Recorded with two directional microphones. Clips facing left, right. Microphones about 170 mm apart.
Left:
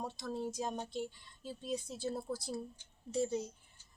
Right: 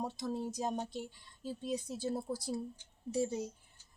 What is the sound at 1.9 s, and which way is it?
A woman's voice, 15° right (ahead or behind).